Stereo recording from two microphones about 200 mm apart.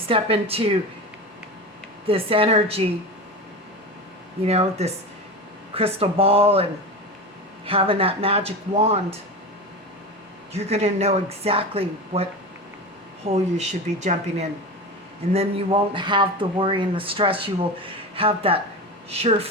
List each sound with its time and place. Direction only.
0.1 s a man's voice: 30° right (ahead or behind)
2.0 s a man's voice: 25° right (ahead or behind)
4.4 s a man's voice: 30° right (ahead or behind)
10.5 s a man's voice: 30° right (ahead or behind)